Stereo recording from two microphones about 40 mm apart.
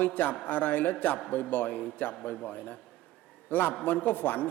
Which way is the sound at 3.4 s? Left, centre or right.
Left.